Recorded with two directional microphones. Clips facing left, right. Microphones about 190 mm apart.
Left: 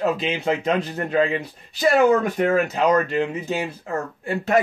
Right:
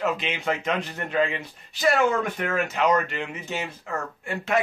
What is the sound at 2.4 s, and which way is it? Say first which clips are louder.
Speech: left 6 dB; 35° left (ahead or behind).